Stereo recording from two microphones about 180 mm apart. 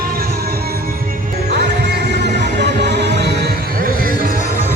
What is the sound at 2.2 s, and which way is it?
Music, 70° right (ahead or behind).